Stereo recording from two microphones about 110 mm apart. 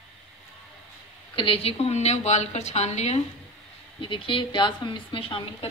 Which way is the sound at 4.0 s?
50° left (ahead or behind).